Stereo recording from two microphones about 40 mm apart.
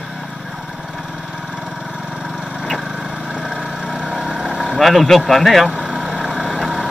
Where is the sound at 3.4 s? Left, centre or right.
Right.